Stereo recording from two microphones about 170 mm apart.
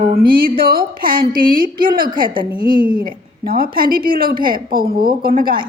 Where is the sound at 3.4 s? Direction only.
60° right (ahead or behind).